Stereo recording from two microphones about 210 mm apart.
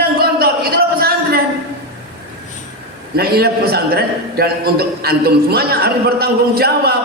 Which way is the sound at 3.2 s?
50° right (ahead or behind).